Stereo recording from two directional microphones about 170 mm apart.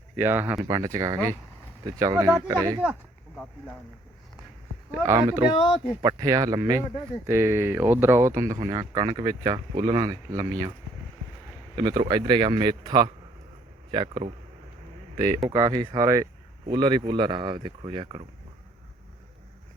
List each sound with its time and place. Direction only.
0.2 s speech: 10° right (ahead or behind)
4.9 s speech: 20° right (ahead or behind)
5.5 s speech: 30° left (ahead or behind)
6.0 s speech: 25° right (ahead or behind)
11.8 s speech: 25° right (ahead or behind)
15.4 s speech: 25° right (ahead or behind)